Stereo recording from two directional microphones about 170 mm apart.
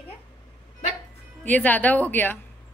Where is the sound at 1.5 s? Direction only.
10° left (ahead or behind).